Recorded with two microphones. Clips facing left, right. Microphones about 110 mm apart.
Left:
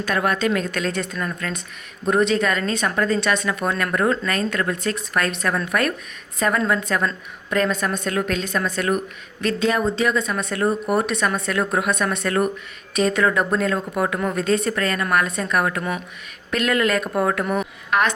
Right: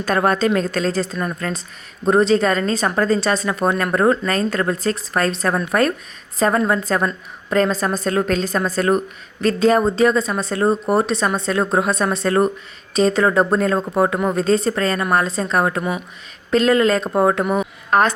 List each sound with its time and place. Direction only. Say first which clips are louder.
0.0 s speech: right 4 dB; 40° right (ahead or behind)
17.9 s speech: right 4 dB; 35° right (ahead or behind)